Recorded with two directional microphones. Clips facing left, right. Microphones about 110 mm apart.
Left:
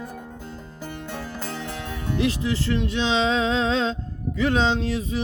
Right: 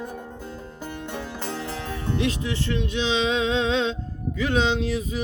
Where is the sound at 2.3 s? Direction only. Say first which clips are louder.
Left 2 dB; 35° left (ahead or behind).